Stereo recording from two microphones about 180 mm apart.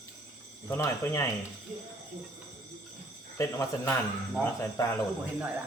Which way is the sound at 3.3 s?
15° left (ahead or behind).